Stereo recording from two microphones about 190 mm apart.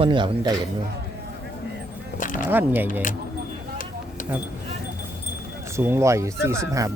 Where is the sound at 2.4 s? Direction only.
10° right (ahead or behind).